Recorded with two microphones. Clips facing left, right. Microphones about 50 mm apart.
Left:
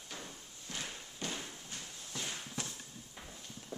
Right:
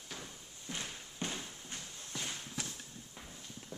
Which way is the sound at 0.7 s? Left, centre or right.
Centre.